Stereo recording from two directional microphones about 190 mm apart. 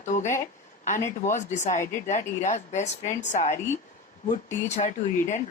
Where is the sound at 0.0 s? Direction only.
40° left (ahead or behind).